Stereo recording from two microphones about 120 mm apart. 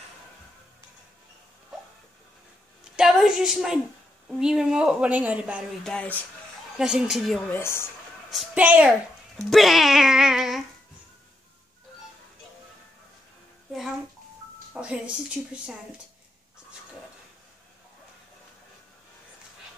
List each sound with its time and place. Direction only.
3.0 s a woman's voice: 5° right (ahead or behind)
5.9 s speech: 10° left (ahead or behind)
6.8 s speech: 5° right (ahead or behind)
7.4 s speech: 20° left (ahead or behind)
8.5 s a woman's voice: 10° right (ahead or behind)
9.4 s speech: centre (ahead or behind)
13.7 s a child's voice: centre (ahead or behind)